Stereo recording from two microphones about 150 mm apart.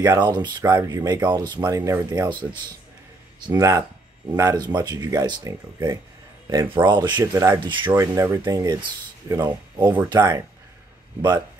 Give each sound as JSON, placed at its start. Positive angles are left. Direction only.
{"t": 0.0, "sound": "speech", "side_deg": -25}